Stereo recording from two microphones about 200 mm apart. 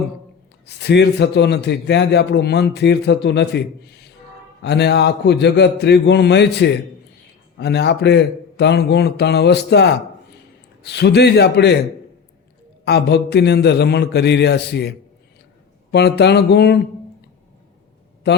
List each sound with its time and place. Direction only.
0.6 s a man's voice: 55° left (ahead or behind)
12.8 s a man's voice: 55° left (ahead or behind)
18.3 s a man's voice: 55° left (ahead or behind)